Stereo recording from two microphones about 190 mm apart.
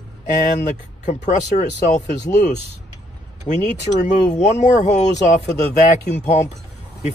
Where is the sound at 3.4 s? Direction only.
40° left (ahead or behind).